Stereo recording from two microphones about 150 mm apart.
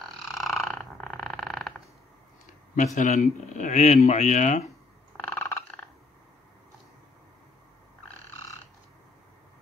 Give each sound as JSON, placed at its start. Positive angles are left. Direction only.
{"t": 0.3, "sound": "frog", "side_deg": 0}
{"t": 2.7, "sound": "speech", "side_deg": 55}
{"t": 5.2, "sound": "a sound", "side_deg": 15}